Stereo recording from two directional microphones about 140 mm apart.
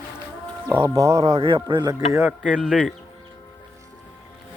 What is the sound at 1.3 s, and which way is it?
Speech, 40° right (ahead or behind).